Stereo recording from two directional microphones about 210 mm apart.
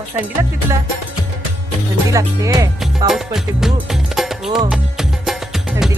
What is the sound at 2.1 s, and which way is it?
Speech, 15° right (ahead or behind).